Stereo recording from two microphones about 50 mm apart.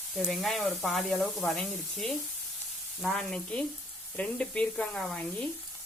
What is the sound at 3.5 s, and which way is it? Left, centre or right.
Speech, centre.